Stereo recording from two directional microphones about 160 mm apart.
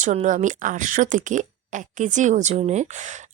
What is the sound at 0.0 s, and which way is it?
Speech, 50° right (ahead or behind).